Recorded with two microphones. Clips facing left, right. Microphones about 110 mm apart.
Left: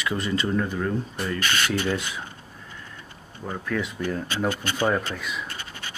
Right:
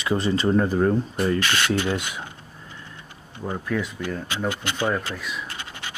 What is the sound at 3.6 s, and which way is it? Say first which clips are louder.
Speech: even; 5° right (ahead or behind).